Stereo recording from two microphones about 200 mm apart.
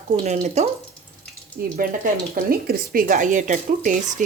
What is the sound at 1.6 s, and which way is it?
Speech, 50° right (ahead or behind).